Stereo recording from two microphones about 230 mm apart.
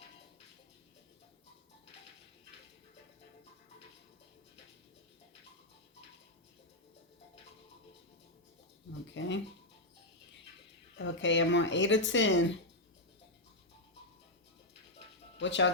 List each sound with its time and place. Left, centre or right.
9.2 s speech: left
10.9 s speech: left
15.4 s speech: left